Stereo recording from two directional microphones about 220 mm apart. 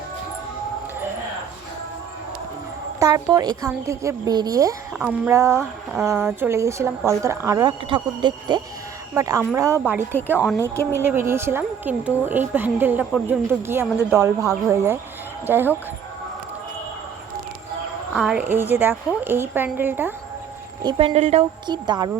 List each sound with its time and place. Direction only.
3.0 s a woman's voice: 15° right (ahead or behind)
18.1 s speech: 5° right (ahead or behind)
20.8 s a woman's voice: 25° right (ahead or behind)